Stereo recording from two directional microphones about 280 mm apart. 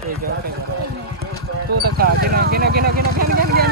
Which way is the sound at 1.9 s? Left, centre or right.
Right.